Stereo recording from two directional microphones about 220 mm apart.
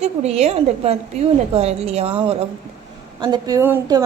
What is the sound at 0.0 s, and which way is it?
A woman's voice, 30° right (ahead or behind).